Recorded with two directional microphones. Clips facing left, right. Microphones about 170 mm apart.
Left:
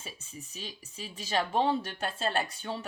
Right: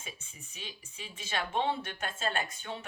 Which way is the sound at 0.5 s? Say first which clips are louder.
Left 1 dB; 35° left (ahead or behind).